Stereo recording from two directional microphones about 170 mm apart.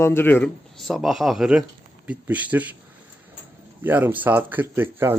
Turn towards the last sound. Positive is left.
turn(degrees=-15)  # may be behind; listen again after turning